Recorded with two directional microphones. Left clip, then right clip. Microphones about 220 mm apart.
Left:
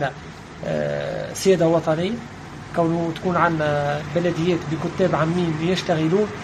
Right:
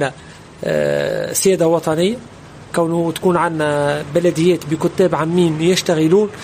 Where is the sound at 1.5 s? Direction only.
55° right (ahead or behind).